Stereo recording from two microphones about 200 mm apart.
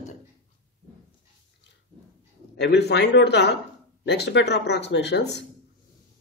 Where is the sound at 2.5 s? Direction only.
55° left (ahead or behind).